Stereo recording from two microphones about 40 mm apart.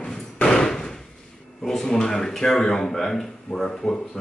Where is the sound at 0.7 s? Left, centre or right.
Centre.